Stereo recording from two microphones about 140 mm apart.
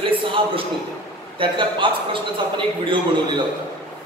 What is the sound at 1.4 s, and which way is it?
A man's voice, 35° right (ahead or behind).